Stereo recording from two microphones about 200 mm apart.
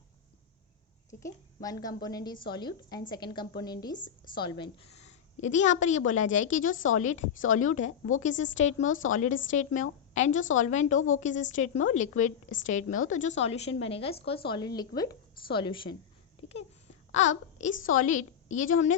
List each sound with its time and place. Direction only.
1.6 s a woman's voice: 20° left (ahead or behind); by 7.7 s 40° left (ahead or behind)
7.9 s speech: 90° left
8.2 s a woman's voice: 40° left (ahead or behind)
17.1 s a woman's voice: 35° left (ahead or behind)